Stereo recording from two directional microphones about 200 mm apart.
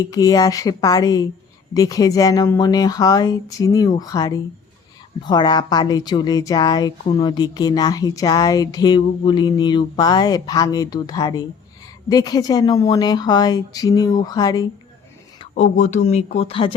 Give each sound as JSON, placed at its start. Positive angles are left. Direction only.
{"t": 0.0, "sound": "a woman's voice", "side_deg": 20}
{"t": 15.4, "sound": "speech", "side_deg": 35}